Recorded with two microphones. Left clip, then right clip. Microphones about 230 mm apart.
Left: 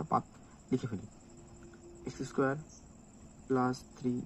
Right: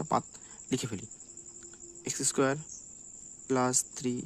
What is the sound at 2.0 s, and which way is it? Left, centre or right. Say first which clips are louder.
Speech: right 4 dB; right.